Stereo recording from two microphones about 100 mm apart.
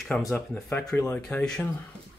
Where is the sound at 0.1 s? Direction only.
10° left (ahead or behind).